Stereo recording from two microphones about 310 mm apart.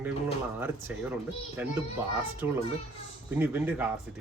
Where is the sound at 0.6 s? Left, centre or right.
Centre.